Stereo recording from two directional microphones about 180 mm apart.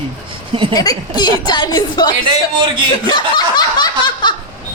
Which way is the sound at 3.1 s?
25° left (ahead or behind).